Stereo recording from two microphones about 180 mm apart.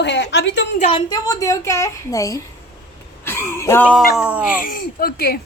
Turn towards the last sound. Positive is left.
turn(degrees=55)  # may be behind; listen again after turning